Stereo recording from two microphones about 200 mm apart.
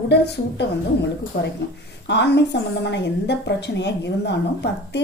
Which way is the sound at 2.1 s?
60° left (ahead or behind).